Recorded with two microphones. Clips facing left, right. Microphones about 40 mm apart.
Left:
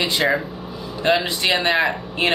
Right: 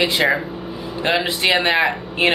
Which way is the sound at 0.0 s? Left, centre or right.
Right.